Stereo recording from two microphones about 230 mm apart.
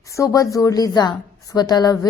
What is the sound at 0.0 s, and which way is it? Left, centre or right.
A woman's voice, centre.